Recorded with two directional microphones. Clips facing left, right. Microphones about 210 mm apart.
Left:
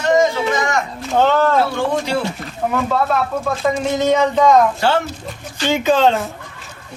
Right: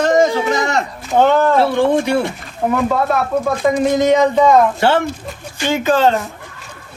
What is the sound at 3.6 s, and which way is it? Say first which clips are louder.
Speech: right 3 dB; 10° right (ahead or behind).